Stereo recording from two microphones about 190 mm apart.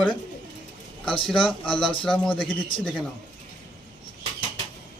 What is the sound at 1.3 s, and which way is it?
A man's voice, 5° left (ahead or behind).